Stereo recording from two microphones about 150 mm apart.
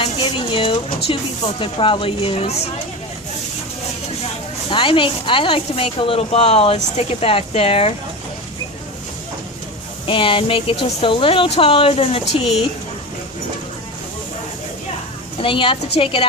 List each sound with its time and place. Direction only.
0.0 s speech: 35° left (ahead or behind)
4.7 s speech: 35° left (ahead or behind)
10.1 s speech: 35° left (ahead or behind)
15.4 s speech: 35° left (ahead or behind)